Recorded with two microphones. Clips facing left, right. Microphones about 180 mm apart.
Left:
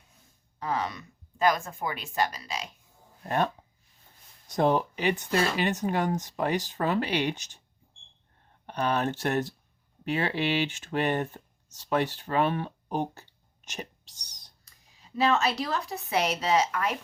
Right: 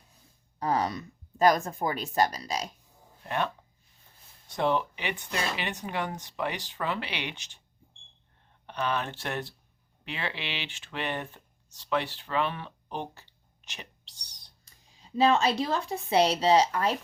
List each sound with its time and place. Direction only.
0.6 s speech: 40° right (ahead or behind)
3.2 s speech: 40° left (ahead or behind)
4.5 s speech: 40° left (ahead or behind)
8.6 s speech: 45° left (ahead or behind)
15.2 s a woman's voice: 30° right (ahead or behind)